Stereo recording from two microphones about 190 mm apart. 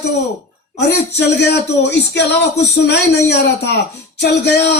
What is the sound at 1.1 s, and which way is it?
Speech, 65° left (ahead or behind).